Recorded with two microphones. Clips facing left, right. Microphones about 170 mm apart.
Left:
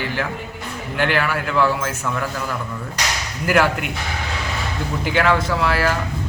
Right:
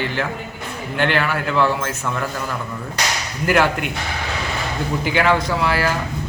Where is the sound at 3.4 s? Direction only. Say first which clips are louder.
Even; 5° left (ahead or behind).